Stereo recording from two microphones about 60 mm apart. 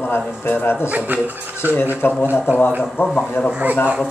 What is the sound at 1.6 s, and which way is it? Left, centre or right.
Speech, right.